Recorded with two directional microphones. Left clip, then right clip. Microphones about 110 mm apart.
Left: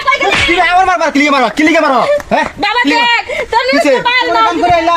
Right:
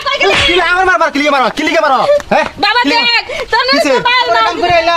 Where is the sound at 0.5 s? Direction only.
50° right (ahead or behind).